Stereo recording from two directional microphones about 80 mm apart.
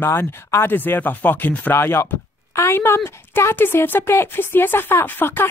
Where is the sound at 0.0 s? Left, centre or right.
Left.